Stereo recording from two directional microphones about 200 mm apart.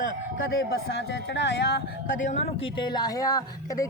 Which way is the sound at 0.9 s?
60° left (ahead or behind).